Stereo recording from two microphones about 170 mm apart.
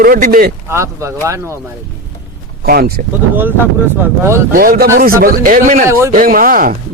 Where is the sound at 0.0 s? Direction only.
60° right (ahead or behind).